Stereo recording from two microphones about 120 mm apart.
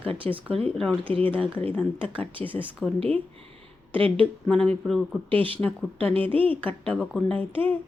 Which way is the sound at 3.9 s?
50° right (ahead or behind).